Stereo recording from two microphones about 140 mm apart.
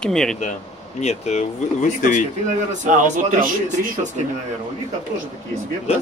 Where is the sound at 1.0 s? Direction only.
55° left (ahead or behind).